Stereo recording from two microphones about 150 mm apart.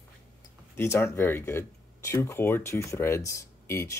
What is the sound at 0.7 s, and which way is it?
Speech, 15° left (ahead or behind).